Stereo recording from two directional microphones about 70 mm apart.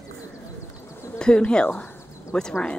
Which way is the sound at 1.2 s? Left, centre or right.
Centre.